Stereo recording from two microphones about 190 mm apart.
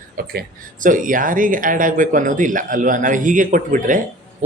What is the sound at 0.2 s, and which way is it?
Speech, 50° right (ahead or behind).